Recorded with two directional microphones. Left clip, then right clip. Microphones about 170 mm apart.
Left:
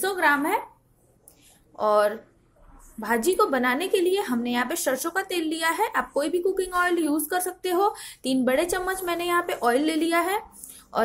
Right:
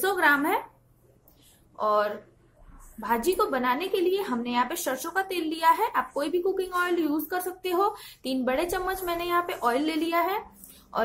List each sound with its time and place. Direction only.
0.0 s speech: centre (ahead or behind)
1.8 s a woman's voice: 25° left (ahead or behind)